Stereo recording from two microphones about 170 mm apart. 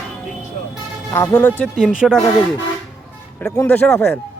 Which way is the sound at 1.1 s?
15° left (ahead or behind).